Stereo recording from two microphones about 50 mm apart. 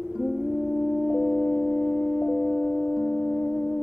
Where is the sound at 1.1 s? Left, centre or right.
Centre.